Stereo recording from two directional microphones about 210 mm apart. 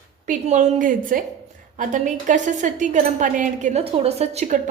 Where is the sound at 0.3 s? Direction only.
35° right (ahead or behind).